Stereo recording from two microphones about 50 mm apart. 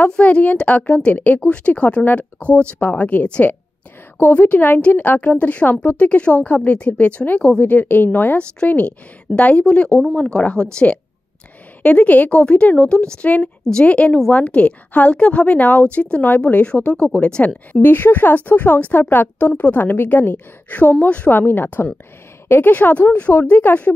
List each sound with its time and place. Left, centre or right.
0.1 s a woman's voice: left
7.7 s speech: left
8.6 s a woman's voice: left
17.8 s a woman's voice: left
21.3 s speech: left